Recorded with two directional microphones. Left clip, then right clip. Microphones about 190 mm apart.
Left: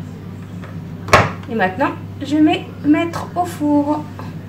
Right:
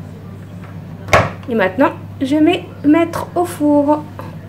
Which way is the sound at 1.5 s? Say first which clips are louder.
Right 4 dB; 45° right (ahead or behind).